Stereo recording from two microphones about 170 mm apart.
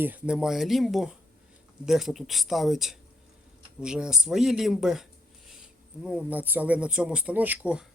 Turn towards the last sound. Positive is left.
turn(degrees=-5)  # may be behind; listen again after turning